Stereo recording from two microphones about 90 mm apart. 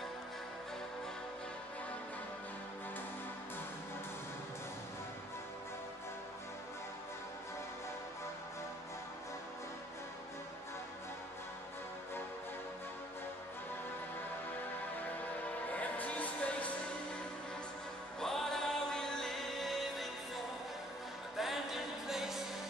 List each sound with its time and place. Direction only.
15.7 s music: 15° left (ahead or behind)
18.2 s music: 5° left (ahead or behind)